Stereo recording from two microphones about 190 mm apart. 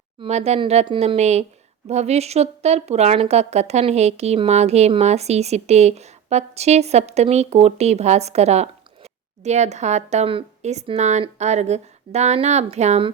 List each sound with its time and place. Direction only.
0.2 s a woman's voice: 35° right (ahead or behind)